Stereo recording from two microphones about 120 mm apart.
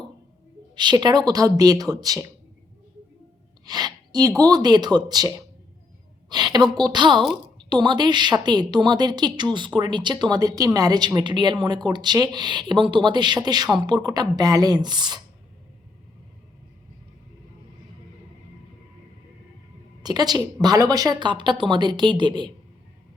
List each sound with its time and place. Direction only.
0.8 s a woman's voice: 35° right (ahead or behind)
3.7 s a woman's voice: 35° right (ahead or behind)
20.0 s a woman's voice: 35° right (ahead or behind)